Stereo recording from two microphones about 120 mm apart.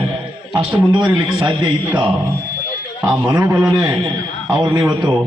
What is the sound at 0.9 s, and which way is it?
A man's voice, 35° right (ahead or behind).